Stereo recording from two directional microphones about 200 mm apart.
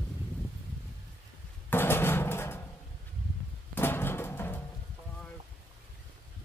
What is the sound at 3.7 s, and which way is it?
Music, 10° left (ahead or behind).